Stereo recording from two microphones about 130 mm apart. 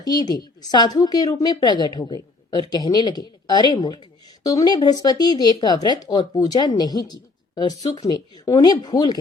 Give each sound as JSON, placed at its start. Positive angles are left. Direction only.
{"t": 0.0, "sound": "a woman's voice", "side_deg": 30}